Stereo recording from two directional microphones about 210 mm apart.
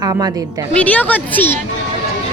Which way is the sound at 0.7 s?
5° left (ahead or behind).